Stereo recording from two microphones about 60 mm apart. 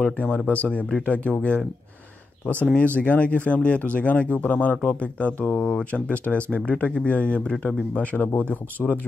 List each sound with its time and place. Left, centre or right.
0.0 s speech: centre
2.7 s speech: left